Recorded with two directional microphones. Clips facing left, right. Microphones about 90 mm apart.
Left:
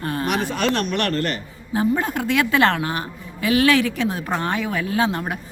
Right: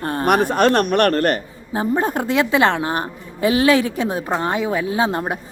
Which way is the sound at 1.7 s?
30° right (ahead or behind).